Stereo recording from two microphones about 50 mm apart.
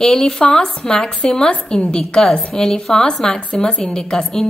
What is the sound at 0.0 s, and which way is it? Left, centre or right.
A woman's voice, centre.